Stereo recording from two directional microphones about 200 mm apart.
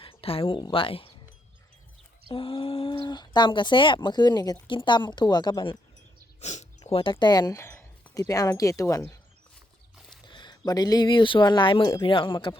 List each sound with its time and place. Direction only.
0.0 s speech: 30° left (ahead or behind)
2.3 s speech: 25° left (ahead or behind)
6.4 s speech: 35° left (ahead or behind); by 9.1 s 15° left (ahead or behind)
10.2 s a sound: 25° left (ahead or behind)
10.7 s speech: 20° left (ahead or behind)